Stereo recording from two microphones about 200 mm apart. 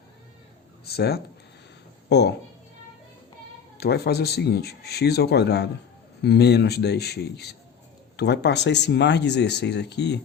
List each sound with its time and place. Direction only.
0.9 s speech: 55° left (ahead or behind)
3.8 s speech: 55° left (ahead or behind)